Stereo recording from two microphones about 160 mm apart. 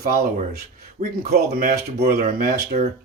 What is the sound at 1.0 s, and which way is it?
Speech, 45° right (ahead or behind).